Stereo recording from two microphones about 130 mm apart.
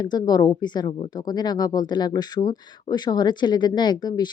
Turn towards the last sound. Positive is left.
turn(degrees=35)  # may be behind; listen again after turning